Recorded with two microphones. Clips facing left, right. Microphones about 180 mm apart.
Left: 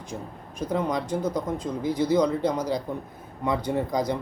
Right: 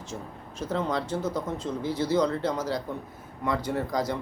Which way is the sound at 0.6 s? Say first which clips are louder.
Left 2 dB; 15° left (ahead or behind).